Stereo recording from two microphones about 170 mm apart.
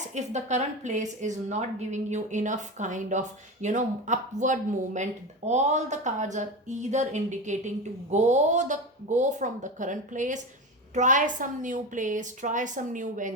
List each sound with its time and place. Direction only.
0.1 s a woman's voice: 45° right (ahead or behind)